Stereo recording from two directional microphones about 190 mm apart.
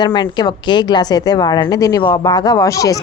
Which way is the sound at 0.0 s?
25° left (ahead or behind).